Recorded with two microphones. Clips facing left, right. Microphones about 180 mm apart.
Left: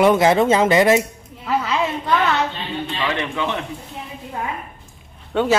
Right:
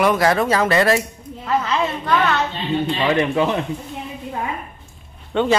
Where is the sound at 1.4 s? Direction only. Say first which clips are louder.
Right 1 dB; 10° left (ahead or behind).